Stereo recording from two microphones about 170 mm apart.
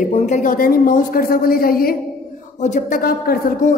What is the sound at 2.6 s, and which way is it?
A woman's voice, 45° left (ahead or behind).